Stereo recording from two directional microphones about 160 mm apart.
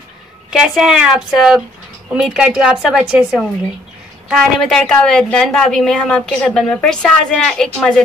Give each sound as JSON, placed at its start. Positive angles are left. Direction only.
{"t": 0.5, "sound": "a woman's voice", "side_deg": -5}